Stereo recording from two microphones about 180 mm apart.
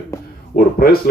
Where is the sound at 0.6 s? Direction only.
55° left (ahead or behind).